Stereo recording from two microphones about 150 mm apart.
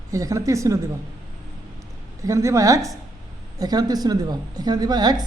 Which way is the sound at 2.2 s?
20° right (ahead or behind).